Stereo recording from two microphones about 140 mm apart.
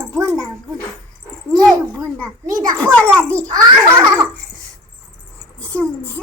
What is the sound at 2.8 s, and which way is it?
Speech, 10° left (ahead or behind).